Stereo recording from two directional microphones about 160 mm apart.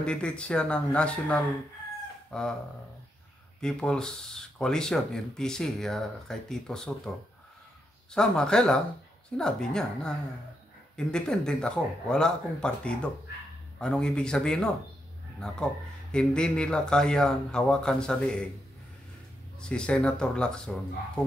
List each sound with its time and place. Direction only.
0.0 s speech: 5° left (ahead or behind)
3.6 s speech: 5° left (ahead or behind)
8.1 s speech: 5° left (ahead or behind)
19.7 s speech: 5° left (ahead or behind)